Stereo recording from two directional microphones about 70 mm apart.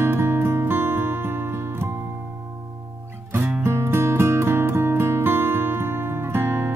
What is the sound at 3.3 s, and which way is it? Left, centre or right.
Music, right.